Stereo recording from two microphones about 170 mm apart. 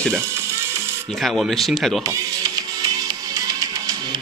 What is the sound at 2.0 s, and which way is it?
Music, 20° right (ahead or behind).